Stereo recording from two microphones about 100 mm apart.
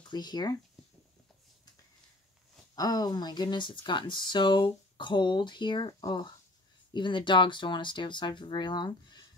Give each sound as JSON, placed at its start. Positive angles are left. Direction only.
{"t": 0.1, "sound": "speech", "side_deg": 45}
{"t": 2.7, "sound": "speech", "side_deg": 40}